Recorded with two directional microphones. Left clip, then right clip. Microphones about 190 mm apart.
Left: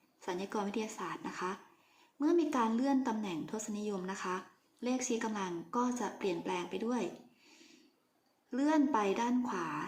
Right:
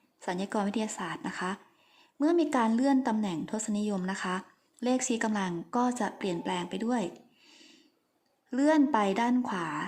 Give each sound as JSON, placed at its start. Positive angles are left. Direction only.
{"t": 0.2, "sound": "a woman's voice", "side_deg": -45}